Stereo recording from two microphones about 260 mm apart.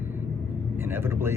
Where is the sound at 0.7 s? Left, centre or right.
Centre.